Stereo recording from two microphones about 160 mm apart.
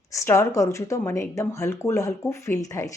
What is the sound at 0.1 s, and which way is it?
Speech, 20° left (ahead or behind).